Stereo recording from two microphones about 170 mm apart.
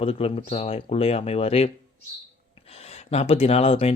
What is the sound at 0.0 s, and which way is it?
Speech, 35° left (ahead or behind).